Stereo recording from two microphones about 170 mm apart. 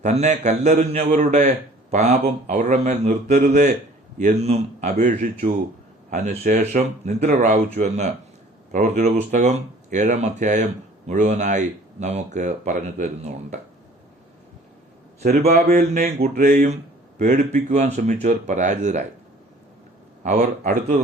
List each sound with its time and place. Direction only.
0.0 s a man's voice: 40° right (ahead or behind)
15.4 s speech: 40° right (ahead or behind)
15.6 s a sound: 60° right (ahead or behind)
16.3 s speech: 50° right (ahead or behind)
20.2 s speech: 45° right (ahead or behind)